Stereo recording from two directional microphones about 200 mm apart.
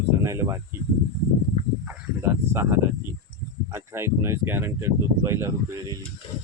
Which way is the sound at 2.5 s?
10° right (ahead or behind).